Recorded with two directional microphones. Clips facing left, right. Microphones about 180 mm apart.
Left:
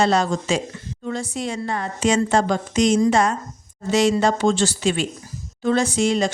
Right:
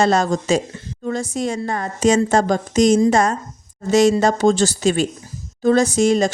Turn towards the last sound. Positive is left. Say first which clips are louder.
# right 4 dB
turn(degrees=-45)  # may be behind; listen again after turning